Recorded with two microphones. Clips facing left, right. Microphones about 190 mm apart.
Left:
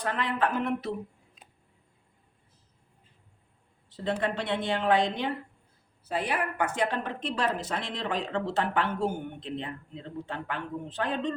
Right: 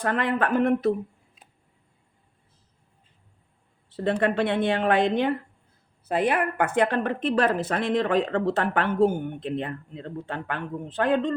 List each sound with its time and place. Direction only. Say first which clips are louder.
0.0 s speech: right 4 dB; 55° right (ahead or behind)
3.9 s a woman's voice: right 6 dB; 60° right (ahead or behind)